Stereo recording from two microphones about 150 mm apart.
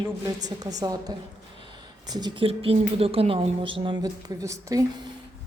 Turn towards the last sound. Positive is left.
turn(degrees=-20)  # may be behind; listen again after turning